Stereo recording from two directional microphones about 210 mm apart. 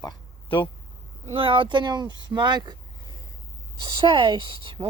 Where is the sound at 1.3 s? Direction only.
25° right (ahead or behind).